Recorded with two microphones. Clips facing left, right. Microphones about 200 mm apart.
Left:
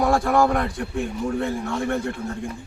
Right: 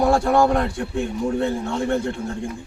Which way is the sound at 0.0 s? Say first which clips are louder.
Right 2 dB; 25° right (ahead or behind).